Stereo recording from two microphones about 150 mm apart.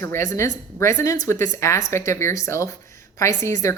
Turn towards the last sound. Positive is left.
turn(degrees=20)  # may be behind; listen again after turning